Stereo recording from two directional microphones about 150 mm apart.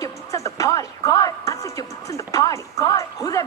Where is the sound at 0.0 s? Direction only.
20° left (ahead or behind).